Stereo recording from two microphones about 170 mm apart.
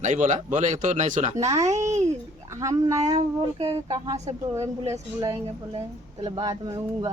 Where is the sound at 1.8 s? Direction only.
40° right (ahead or behind).